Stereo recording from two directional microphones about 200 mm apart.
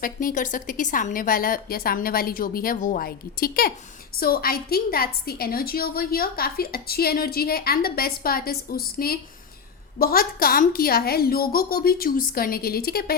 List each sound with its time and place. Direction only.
0.0 s a woman's voice: 45° left (ahead or behind)